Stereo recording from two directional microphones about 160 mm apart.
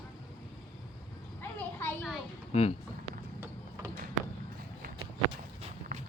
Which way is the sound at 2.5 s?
40° left (ahead or behind).